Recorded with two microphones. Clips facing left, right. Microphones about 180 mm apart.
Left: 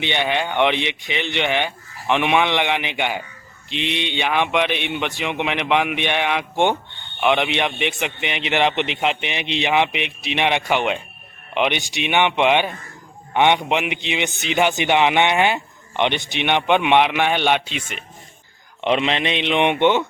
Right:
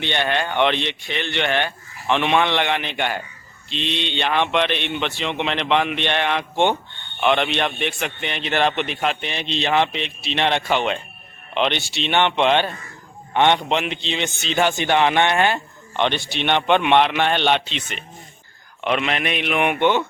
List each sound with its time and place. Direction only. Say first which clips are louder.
0.0 s a man's voice: left 1 dB; 15° left (ahead or behind)
18.8 s speech: left 2 dB; 25° left (ahead or behind)